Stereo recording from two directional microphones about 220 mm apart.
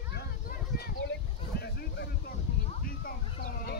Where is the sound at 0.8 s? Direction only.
45° left (ahead or behind).